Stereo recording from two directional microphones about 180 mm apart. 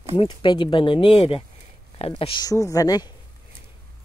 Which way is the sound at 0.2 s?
25° left (ahead or behind).